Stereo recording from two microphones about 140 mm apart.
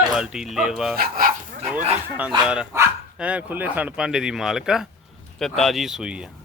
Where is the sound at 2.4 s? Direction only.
5° right (ahead or behind).